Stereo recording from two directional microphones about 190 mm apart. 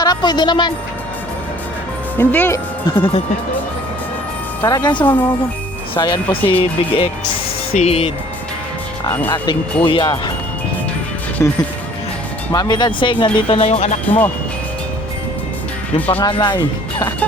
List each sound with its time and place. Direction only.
0.0 s speech: 20° left (ahead or behind)
2.1 s speech: 10° left (ahead or behind)
2.8 s speech: 30° left (ahead or behind)
4.6 s speech: 20° left (ahead or behind)
9.8 s speech: 25° left (ahead or behind)
11.4 s speech: 15° left (ahead or behind); by 14.2 s 35° left (ahead or behind)
16.2 s speech: 25° left (ahead or behind)